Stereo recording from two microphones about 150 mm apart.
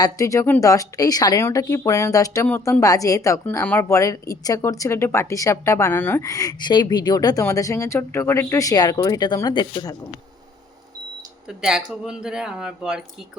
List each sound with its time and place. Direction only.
0.0 s a woman's voice: 20° left (ahead or behind)
2.5 s speech: 10° left (ahead or behind)
2.8 s a woman's voice: 25° left (ahead or behind)
11.4 s speech: 5° right (ahead or behind)